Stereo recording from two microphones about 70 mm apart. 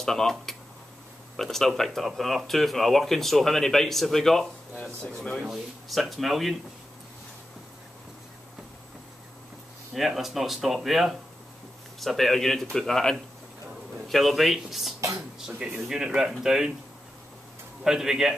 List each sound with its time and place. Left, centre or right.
0.0 s speech: centre
5.0 s speech: centre
5.5 s speech: centre
9.9 s speech: centre
17.8 s speech: centre